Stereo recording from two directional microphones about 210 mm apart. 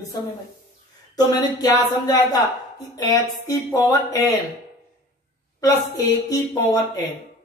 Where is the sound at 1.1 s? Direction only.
20° left (ahead or behind).